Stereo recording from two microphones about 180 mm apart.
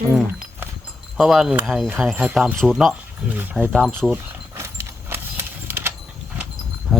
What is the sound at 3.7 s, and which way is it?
Speech, centre (ahead or behind).